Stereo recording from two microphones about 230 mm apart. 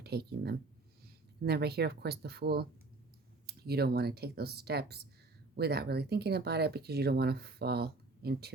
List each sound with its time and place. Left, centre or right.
0.0 s speech: right